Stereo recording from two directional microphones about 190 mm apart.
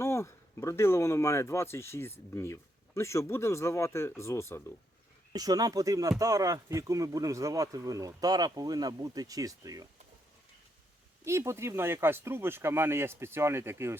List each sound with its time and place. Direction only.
0.0 s speech: 15° left (ahead or behind)
5.3 s speech: 20° right (ahead or behind)
11.3 s speech: 15° right (ahead or behind)